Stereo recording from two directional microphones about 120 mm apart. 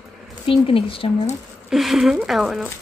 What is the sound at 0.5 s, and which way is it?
Speech, 50° left (ahead or behind).